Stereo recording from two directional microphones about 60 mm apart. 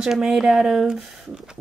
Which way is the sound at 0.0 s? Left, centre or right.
Centre.